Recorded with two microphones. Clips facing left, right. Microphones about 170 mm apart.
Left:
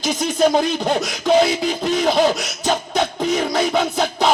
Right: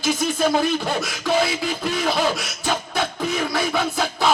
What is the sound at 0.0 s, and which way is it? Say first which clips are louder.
Speech: left 3 dB; 20° left (ahead or behind).